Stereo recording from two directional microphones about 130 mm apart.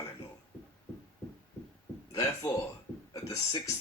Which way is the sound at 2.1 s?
25° left (ahead or behind).